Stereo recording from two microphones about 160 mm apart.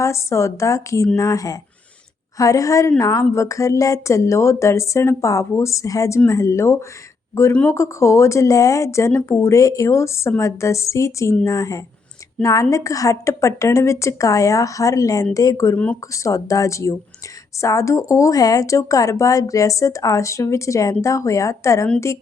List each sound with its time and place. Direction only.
0.0 s a woman's voice: 20° left (ahead or behind)